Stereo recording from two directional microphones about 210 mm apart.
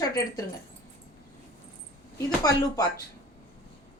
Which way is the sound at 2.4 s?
15° left (ahead or behind).